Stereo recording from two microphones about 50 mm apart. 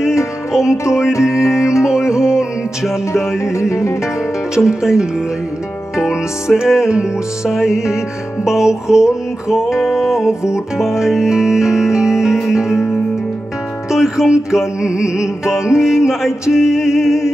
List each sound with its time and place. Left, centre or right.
0.5 s music: centre
3.1 s music: left
4.6 s music: centre